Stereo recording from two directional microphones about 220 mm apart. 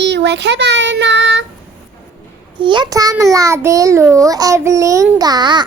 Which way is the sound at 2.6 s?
20° right (ahead or behind).